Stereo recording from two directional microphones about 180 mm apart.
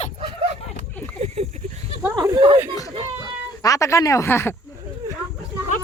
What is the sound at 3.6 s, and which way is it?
Speech, 20° left (ahead or behind).